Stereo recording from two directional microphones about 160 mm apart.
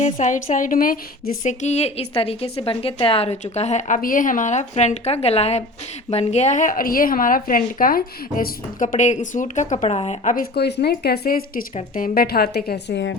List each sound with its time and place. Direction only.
0.0 s a woman's voice: 50° left (ahead or behind)
1.5 s speech: 45° left (ahead or behind)
10.3 s speech: 80° left
11.7 s speech: 50° left (ahead or behind); by 13.1 s 90° left